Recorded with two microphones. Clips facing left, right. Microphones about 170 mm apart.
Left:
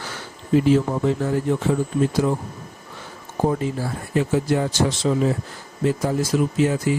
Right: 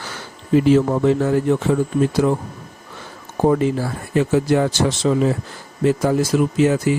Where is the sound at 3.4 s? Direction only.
85° right.